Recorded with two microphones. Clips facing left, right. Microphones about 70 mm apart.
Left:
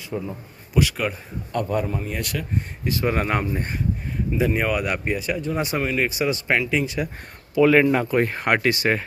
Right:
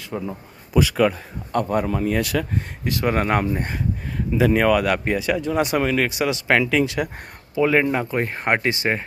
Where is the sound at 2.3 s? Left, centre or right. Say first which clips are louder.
Right 6 dB; right.